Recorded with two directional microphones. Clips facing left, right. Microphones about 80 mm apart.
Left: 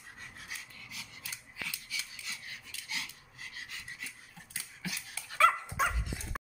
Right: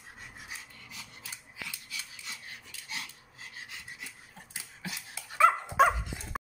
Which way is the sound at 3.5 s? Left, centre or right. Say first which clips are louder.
Even; centre.